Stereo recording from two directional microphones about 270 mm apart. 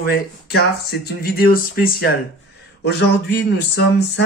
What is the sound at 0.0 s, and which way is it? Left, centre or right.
Speech, left.